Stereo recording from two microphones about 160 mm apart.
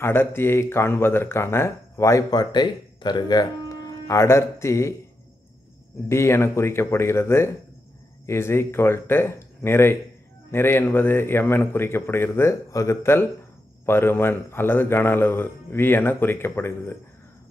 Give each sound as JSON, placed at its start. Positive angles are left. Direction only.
{"t": 0.0, "sound": "speech", "side_deg": 15}
{"t": 6.0, "sound": "speech", "side_deg": 15}